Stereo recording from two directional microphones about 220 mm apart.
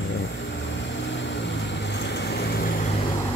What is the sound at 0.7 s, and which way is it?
Vehicle, 55° left (ahead or behind).